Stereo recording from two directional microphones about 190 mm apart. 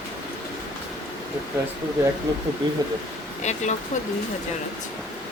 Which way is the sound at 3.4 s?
35° left (ahead or behind).